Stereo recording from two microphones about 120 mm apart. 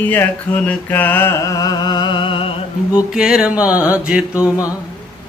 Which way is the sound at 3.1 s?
5° right (ahead or behind).